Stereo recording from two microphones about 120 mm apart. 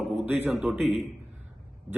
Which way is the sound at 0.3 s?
15° right (ahead or behind).